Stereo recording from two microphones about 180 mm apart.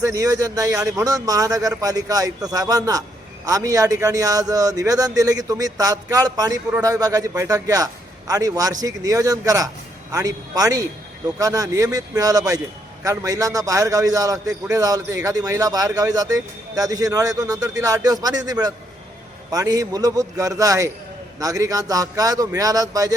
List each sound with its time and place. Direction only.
0.0 s a man's voice: 15° right (ahead or behind)